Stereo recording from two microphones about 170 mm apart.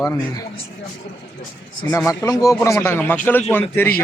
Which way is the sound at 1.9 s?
20° left (ahead or behind).